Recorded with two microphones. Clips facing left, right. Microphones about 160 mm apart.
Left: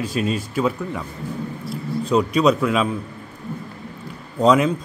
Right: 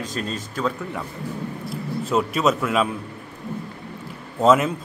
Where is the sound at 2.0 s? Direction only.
5° right (ahead or behind).